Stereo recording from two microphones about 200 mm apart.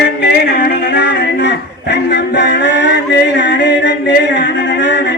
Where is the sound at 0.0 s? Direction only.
55° left (ahead or behind).